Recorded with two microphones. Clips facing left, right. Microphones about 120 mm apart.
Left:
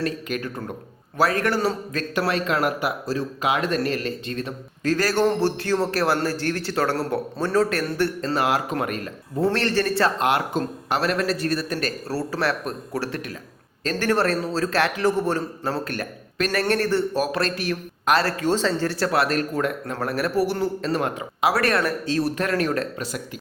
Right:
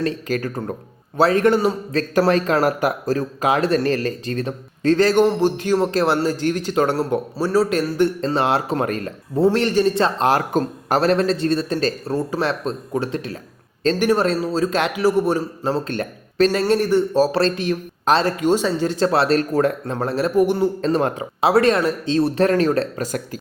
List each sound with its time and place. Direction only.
0.0 s speech: 35° right (ahead or behind)
1.1 s a man's voice: 25° right (ahead or behind)
1.9 s speech: 35° right (ahead or behind)
5.2 s a man's voice: 15° right (ahead or behind); by 9.4 s 30° right (ahead or behind)
9.4 s a man's voice: 15° right (ahead or behind)
10.2 s a man's voice: 40° right (ahead or behind); by 17.0 s 15° right (ahead or behind)
17.2 s a man's voice: 30° right (ahead or behind)
20.8 s a man's voice: 30° right (ahead or behind)